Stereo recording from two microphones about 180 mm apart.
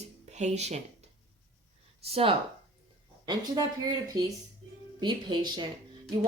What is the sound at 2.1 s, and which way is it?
Speech, 30° right (ahead or behind).